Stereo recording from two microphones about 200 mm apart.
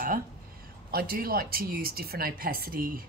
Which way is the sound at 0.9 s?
50° right (ahead or behind).